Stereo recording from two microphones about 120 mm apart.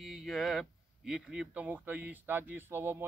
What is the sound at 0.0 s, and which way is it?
Speech, centre (ahead or behind).